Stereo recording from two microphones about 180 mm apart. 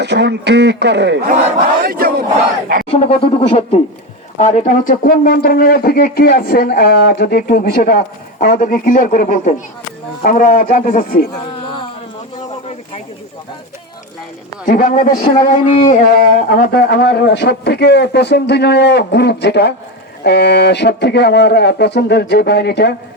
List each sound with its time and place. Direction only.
0.0 s a man's voice: 70° right (ahead or behind)
1.8 s battle cry: 55° right (ahead or behind)
2.9 s speech: 30° left (ahead or behind); by 11.3 s 55° left (ahead or behind)
11.6 s a sound: 25° left (ahead or behind)
14.7 s a man's voice: 50° left (ahead or behind); by 23.0 s 65° left (ahead or behind)